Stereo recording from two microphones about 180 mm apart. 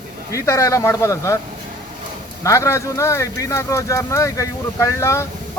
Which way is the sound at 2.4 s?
15° left (ahead or behind).